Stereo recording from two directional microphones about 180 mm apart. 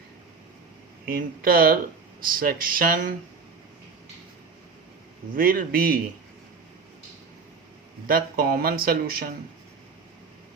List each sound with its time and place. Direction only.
1.0 s speech: 55° right (ahead or behind)
5.3 s speech: 50° right (ahead or behind)
8.0 s speech: 55° right (ahead or behind)